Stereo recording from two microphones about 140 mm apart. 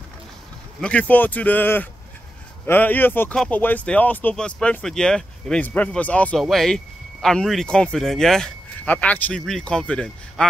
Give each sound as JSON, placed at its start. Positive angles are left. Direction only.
{"t": 0.7, "sound": "speech", "side_deg": 10}